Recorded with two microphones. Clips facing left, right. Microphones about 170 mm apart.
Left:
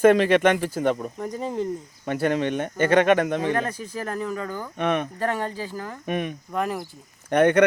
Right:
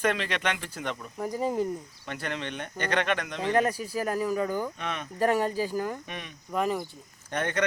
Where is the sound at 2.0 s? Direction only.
45° left (ahead or behind).